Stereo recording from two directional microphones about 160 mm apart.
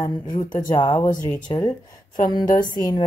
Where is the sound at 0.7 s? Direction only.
25° left (ahead or behind).